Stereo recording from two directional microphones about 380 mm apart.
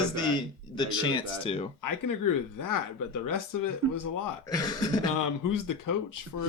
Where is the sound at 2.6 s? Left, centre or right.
Left.